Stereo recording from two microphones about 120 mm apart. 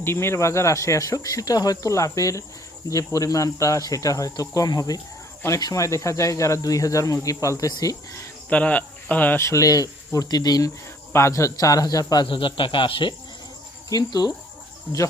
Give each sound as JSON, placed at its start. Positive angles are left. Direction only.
{"t": 0.0, "sound": "speech", "side_deg": 20}
{"t": 8.4, "sound": "speech", "side_deg": 10}
{"t": 13.9, "sound": "speech", "side_deg": 35}